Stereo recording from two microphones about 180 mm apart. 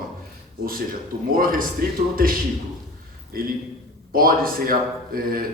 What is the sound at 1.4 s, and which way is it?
Speech, 50° right (ahead or behind).